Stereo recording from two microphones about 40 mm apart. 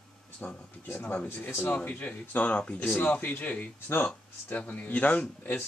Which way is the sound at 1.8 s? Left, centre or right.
Left.